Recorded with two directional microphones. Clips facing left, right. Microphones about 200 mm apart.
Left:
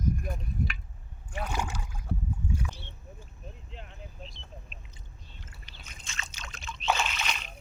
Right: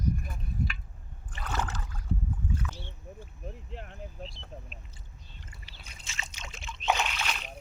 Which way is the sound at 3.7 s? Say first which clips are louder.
Right 4 dB; 55° right (ahead or behind).